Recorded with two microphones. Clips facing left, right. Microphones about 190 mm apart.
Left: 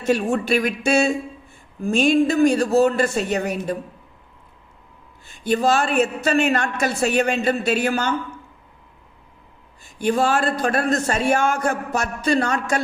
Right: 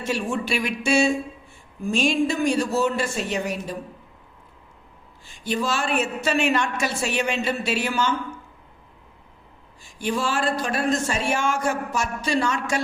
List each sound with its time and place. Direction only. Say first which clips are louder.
0.1 s speech: left 7 dB; 45° left (ahead or behind)
2.3 s a woman's voice: left 5 dB; 55° left (ahead or behind)
2.8 s speech: left 5 dB; 40° left (ahead or behind)
3.3 s a man's voice: left 4 dB; 60° left (ahead or behind)
5.5 s a woman's voice: left 6 dB; 45° left (ahead or behind)
10.1 s a man's voice: left 5 dB; 50° left (ahead or behind)